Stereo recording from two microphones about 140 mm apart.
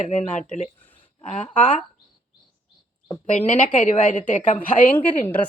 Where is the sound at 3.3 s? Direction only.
60° left (ahead or behind).